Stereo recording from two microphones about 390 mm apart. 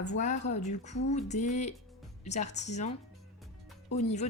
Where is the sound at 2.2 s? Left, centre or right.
Centre.